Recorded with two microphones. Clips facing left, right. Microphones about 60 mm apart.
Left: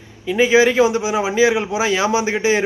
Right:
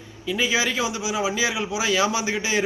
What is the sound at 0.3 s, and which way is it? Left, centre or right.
A man's voice, left.